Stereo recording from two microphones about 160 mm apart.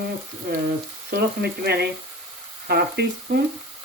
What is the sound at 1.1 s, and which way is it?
Speech, 90° right.